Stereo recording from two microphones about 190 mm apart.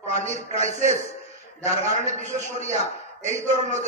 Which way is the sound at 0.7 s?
40° right (ahead or behind).